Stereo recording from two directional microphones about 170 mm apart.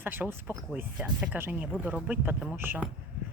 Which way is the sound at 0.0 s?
10° right (ahead or behind).